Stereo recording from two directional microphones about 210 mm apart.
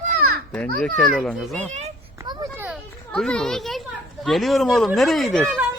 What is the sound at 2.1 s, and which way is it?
Children playing, 20° right (ahead or behind).